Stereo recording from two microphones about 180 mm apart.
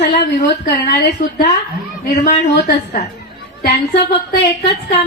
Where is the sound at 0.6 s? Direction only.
60° left (ahead or behind).